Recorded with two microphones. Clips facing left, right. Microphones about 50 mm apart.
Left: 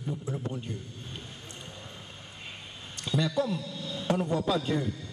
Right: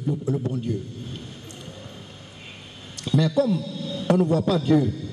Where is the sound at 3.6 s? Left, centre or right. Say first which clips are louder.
Right 6 dB; centre.